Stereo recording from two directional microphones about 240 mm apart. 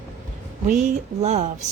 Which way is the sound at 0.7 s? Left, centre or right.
Right.